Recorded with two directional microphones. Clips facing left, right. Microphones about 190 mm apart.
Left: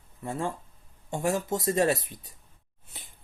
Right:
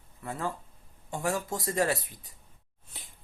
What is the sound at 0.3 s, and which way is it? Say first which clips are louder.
Speech: left 3 dB; 25° left (ahead or behind).